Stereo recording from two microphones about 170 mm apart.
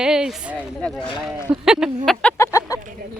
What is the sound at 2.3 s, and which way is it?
Chicken, 20° left (ahead or behind).